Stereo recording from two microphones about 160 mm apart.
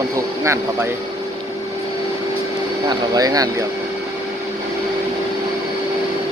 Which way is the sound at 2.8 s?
25° right (ahead or behind).